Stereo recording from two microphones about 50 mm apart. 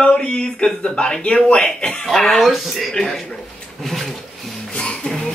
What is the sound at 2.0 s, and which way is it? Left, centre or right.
A man's voice, centre.